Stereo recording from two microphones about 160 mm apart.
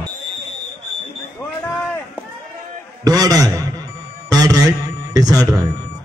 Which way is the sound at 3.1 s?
20° right (ahead or behind).